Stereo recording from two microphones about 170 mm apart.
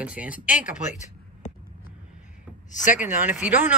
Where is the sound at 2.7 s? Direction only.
45° left (ahead or behind).